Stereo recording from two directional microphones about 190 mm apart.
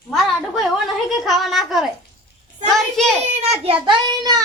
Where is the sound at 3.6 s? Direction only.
30° right (ahead or behind).